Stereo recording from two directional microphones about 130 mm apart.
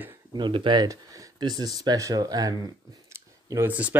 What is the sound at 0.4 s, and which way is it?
Speech, 40° right (ahead or behind).